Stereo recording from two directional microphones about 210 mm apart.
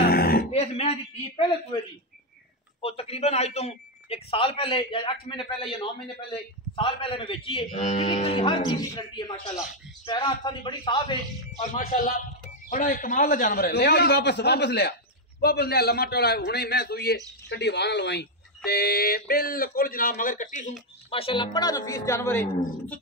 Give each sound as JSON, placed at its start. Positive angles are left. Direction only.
{"t": 0.0, "sound": "a sound", "side_deg": 45}
{"t": 0.5, "sound": "grunt", "side_deg": 30}
{"t": 2.8, "sound": "a man's voice", "side_deg": 30}
{"t": 11.6, "sound": "a man's voice", "side_deg": 40}
{"t": 21.1, "sound": "speech", "side_deg": 25}